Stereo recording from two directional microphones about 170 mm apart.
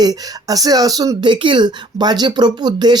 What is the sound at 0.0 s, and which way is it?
Speech, 20° right (ahead or behind).